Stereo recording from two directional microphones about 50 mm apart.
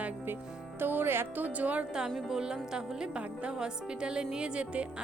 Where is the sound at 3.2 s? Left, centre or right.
Right.